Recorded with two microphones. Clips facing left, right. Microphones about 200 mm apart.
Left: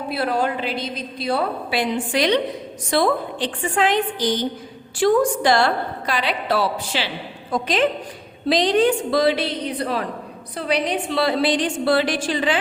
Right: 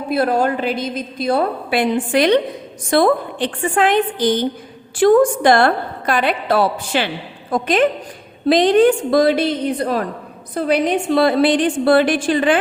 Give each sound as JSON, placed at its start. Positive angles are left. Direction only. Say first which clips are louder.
{"t": 0.1, "sound": "a woman's voice", "louder": "right 6 dB", "side_deg": -45}